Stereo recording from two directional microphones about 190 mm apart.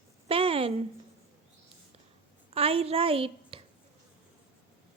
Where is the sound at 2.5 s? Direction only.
30° right (ahead or behind).